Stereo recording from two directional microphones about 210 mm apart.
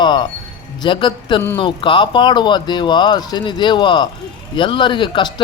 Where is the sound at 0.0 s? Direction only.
20° left (ahead or behind).